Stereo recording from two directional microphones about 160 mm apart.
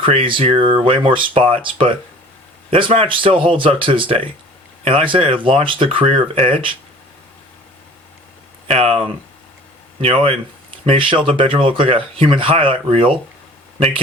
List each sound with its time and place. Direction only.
0.0 s speech: 35° right (ahead or behind)
2.6 s speech: 35° right (ahead or behind)
8.6 s speech: 40° right (ahead or behind)